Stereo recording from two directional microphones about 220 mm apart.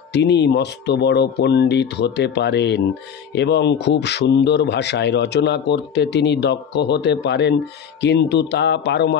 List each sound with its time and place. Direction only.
0.1 s a man's voice: 50° left (ahead or behind)